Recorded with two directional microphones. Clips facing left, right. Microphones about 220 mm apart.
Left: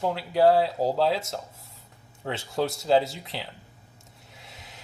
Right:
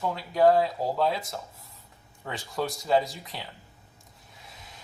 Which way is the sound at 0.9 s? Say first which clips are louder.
Left 3 dB; 85° left.